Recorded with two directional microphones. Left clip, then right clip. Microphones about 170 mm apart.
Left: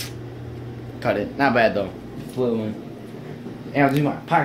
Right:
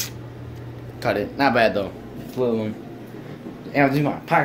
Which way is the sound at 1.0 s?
5° right (ahead or behind).